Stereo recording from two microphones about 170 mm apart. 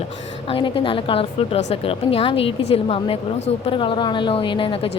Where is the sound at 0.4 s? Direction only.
30° left (ahead or behind).